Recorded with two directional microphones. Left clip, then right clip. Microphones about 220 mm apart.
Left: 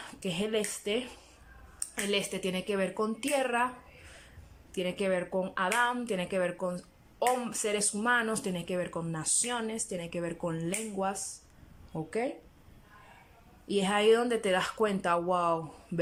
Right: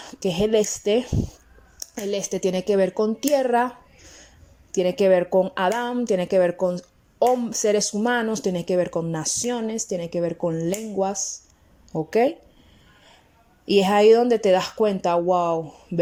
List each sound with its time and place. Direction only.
0.1 s a woman's voice: 25° right (ahead or behind)
4.7 s a woman's voice: 25° right (ahead or behind)
13.7 s a woman's voice: 25° right (ahead or behind)